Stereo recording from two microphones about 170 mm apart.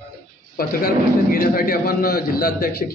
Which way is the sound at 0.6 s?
60° left (ahead or behind).